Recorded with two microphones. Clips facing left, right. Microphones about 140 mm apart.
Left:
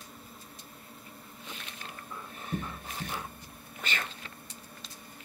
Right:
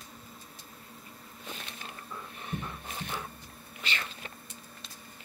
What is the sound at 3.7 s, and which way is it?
Cat, 45° left (ahead or behind).